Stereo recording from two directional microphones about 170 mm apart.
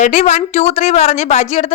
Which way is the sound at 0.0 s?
45° left (ahead or behind).